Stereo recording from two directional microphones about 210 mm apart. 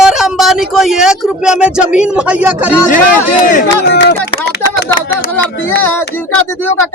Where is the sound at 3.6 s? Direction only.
55° left (ahead or behind).